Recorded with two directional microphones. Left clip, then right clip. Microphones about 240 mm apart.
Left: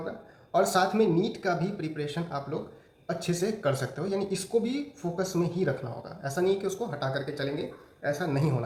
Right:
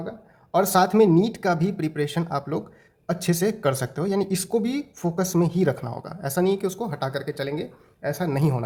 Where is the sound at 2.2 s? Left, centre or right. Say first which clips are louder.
Right 6 dB; right.